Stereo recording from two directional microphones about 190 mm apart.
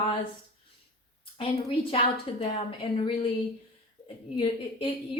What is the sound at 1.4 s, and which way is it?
A woman's voice, 30° left (ahead or behind).